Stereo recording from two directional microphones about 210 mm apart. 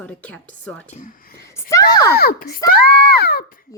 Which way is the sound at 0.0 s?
5° left (ahead or behind).